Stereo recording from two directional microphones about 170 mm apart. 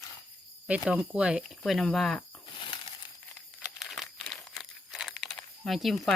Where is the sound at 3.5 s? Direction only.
Centre (ahead or behind).